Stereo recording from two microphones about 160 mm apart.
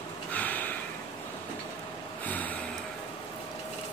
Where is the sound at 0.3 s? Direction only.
10° left (ahead or behind).